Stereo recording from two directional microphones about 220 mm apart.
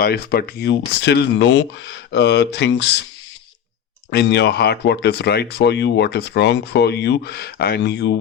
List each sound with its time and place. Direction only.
0.0 s speech: 45° left (ahead or behind)
4.1 s speech: 50° left (ahead or behind)